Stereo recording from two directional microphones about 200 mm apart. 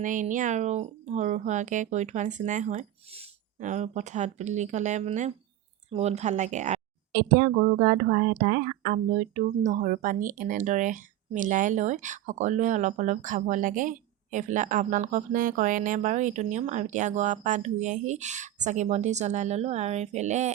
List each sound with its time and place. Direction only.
0.0 s a woman's voice: 40° right (ahead or behind)